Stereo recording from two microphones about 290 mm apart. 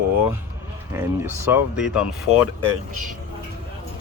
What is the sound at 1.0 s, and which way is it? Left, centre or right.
Speech, centre.